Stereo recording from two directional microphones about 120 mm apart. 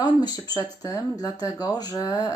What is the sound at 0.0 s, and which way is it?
Speech, 35° left (ahead or behind).